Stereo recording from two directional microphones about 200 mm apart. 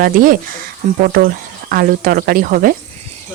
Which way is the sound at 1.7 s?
45° right (ahead or behind).